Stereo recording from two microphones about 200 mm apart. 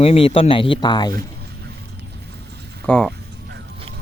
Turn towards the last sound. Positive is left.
turn(degrees=5)  # may be behind; listen again after turning